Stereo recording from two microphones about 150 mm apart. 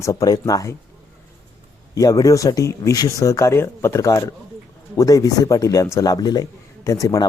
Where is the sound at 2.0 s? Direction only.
25° left (ahead or behind).